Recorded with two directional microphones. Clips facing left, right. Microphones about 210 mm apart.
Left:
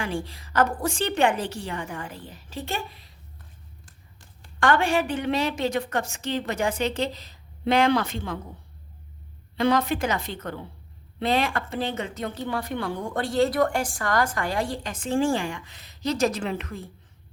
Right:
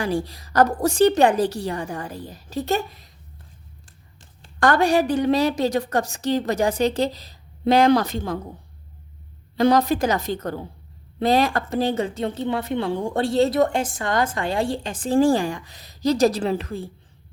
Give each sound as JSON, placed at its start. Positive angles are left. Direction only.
{"t": 0.0, "sound": "speech", "side_deg": -40}
{"t": 4.6, "sound": "speech", "side_deg": -40}
{"t": 9.6, "sound": "speech", "side_deg": -40}